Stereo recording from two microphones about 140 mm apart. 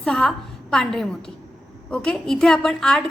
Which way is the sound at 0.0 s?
5° left (ahead or behind).